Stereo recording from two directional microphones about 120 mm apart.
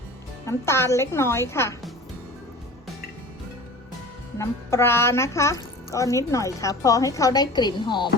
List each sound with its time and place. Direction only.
0.4 s speech: 20° left (ahead or behind)
4.4 s speech: 20° left (ahead or behind); by 8.1 s 40° left (ahead or behind)